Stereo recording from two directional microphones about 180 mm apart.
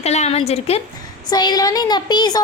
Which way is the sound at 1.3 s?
25° left (ahead or behind).